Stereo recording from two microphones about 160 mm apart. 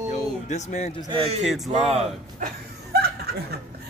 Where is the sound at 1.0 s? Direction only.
35° right (ahead or behind).